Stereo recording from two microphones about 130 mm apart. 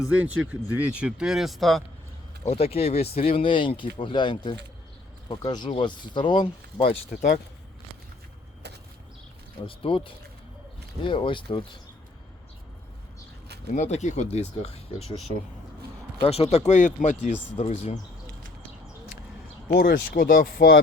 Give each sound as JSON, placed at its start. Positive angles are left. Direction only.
{"t": 0.0, "sound": "speech", "side_deg": -10}
{"t": 2.4, "sound": "speech", "side_deg": 50}
{"t": 9.6, "sound": "speech", "side_deg": 45}
{"t": 13.7, "sound": "speech", "side_deg": 60}
{"t": 16.2, "sound": "speech", "side_deg": 50}
{"t": 17.6, "sound": "speech", "side_deg": 55}
{"t": 19.7, "sound": "speech", "side_deg": 90}